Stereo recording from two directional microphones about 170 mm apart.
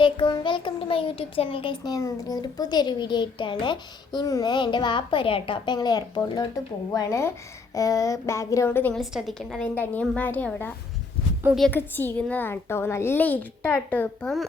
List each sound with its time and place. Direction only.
0.0 s a child's voice: 25° left (ahead or behind); by 9.0 s 10° left (ahead or behind)
9.0 s a child's voice: centre (ahead or behind)
11.7 s a child's voice: 10° left (ahead or behind)